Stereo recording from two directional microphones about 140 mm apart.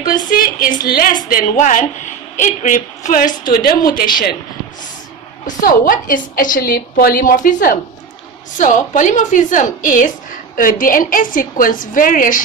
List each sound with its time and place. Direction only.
0.4 s a woman's voice: 90° left
1.3 s a woman's voice: 70° left (ahead or behind)
3.4 s a woman's voice: 90° left
5.5 s a woman's voice: 85° left